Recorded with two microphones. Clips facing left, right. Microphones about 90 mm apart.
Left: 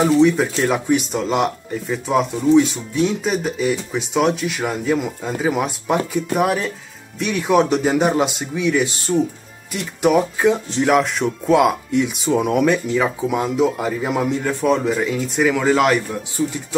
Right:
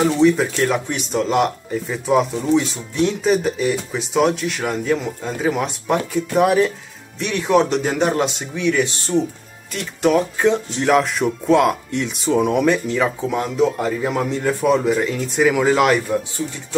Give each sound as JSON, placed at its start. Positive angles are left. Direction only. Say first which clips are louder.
{"t": 0.0, "sound": "speech", "louder": "left 1 dB", "side_deg": 5}